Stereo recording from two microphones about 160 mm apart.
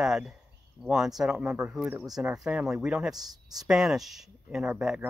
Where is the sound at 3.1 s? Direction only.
25° right (ahead or behind).